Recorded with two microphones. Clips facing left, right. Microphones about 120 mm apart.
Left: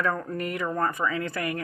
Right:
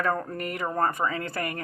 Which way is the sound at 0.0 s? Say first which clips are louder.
Right 1 dB; 35° right (ahead or behind).